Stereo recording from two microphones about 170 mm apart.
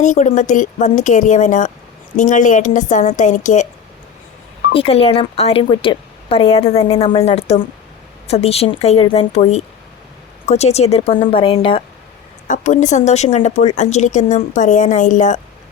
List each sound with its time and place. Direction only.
0.0 s a woman's voice: 45° left (ahead or behind)
4.7 s a woman's voice: 35° left (ahead or behind)
12.5 s a woman's voice: 45° left (ahead or behind)